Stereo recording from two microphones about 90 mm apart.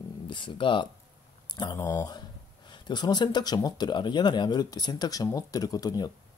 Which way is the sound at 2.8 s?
55° left (ahead or behind).